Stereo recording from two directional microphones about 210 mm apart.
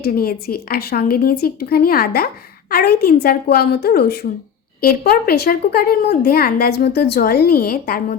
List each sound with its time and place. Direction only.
0.0 s a woman's voice: 45° left (ahead or behind)